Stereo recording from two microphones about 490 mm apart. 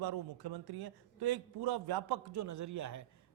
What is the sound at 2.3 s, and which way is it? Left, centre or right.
Speech, right.